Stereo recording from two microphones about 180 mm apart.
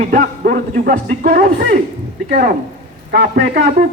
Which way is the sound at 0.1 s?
50° right (ahead or behind).